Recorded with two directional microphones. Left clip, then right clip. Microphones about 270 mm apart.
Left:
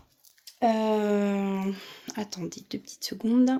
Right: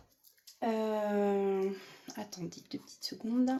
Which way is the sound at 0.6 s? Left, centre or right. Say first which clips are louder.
Left 8 dB; left.